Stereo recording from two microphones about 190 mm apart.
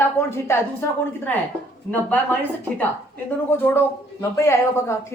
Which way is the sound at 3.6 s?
10° left (ahead or behind).